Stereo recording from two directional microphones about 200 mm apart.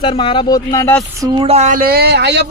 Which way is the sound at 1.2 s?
25° right (ahead or behind).